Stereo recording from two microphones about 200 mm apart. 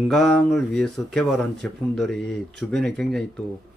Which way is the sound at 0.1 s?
5° left (ahead or behind).